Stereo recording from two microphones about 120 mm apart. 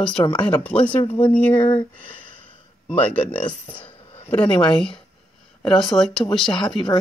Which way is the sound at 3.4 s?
45° left (ahead or behind).